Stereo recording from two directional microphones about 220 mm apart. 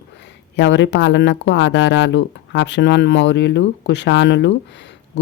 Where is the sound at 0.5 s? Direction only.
55° left (ahead or behind).